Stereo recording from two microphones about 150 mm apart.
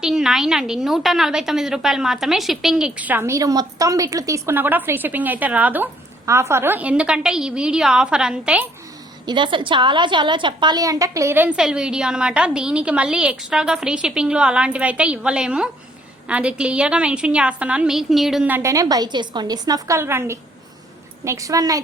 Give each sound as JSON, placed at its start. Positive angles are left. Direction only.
{"t": 0.0, "sound": "a woman's voice", "side_deg": 0}
{"t": 9.2, "sound": "a woman's voice", "side_deg": -30}
{"t": 18.4, "sound": "a woman's voice", "side_deg": -15}